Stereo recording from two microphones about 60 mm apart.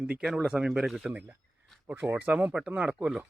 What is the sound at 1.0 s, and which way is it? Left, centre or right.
Speech, right.